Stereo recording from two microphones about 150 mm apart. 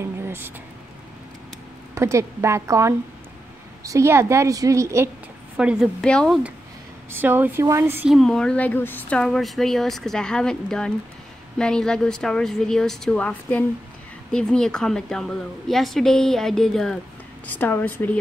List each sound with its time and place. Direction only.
0.0 s a sound: 15° right (ahead or behind)
2.0 s a woman's voice: 20° right (ahead or behind)
5.6 s speech: 5° right (ahead or behind)
7.1 s speech: 15° right (ahead or behind)
8.1 s speech: 5° left (ahead or behind)